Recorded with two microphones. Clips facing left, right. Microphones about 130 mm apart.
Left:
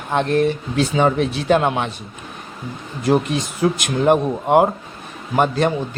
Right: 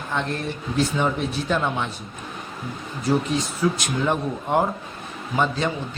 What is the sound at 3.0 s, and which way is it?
Speech, 65° left (ahead or behind).